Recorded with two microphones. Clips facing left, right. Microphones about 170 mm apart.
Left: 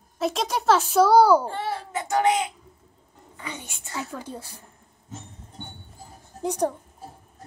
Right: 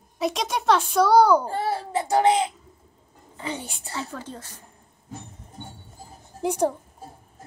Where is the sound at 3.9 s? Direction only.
10° left (ahead or behind).